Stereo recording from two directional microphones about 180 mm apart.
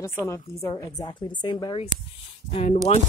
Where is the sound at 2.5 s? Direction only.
35° left (ahead or behind).